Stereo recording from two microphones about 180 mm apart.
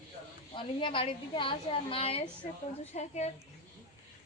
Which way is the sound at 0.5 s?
30° left (ahead or behind).